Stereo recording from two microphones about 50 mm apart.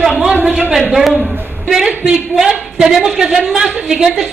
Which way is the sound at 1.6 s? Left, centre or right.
Centre.